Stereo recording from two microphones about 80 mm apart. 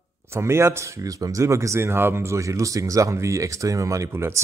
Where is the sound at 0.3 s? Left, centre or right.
Right.